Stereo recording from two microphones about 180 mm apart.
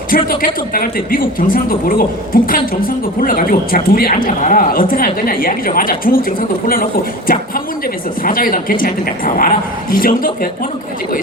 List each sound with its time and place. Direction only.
0.1 s a man's voice: 55° left (ahead or behind)
8.2 s a man's voice: 50° left (ahead or behind)